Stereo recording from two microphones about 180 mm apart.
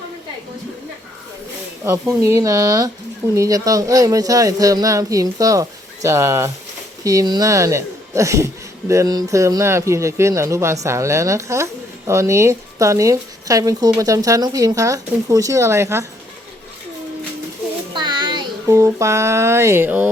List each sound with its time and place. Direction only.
1.8 s a woman's voice: 15° right (ahead or behind)
17.9 s speech: 25° right (ahead or behind)